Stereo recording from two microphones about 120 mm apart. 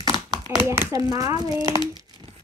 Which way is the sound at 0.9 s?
30° right (ahead or behind).